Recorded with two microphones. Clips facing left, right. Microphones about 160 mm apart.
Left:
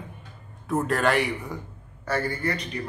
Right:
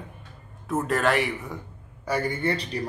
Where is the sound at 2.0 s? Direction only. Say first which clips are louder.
Right 1 dB; 15° right (ahead or behind).